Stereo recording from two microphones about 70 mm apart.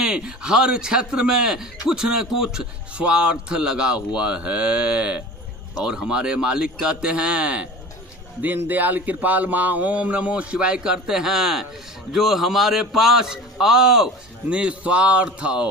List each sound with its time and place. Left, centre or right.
0.0 s a man's voice: centre